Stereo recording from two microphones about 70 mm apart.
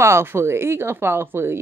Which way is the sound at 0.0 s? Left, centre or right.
Right.